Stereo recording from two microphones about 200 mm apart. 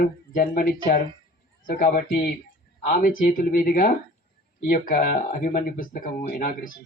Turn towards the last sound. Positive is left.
turn(degrees=45)  # may be behind; listen again after turning